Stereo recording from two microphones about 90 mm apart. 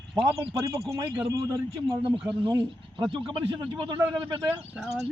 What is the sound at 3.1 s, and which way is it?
Speech, 85° right.